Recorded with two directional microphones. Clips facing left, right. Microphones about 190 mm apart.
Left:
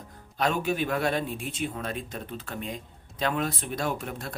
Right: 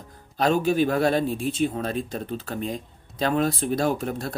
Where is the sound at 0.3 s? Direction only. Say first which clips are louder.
Right 6 dB; 30° right (ahead or behind).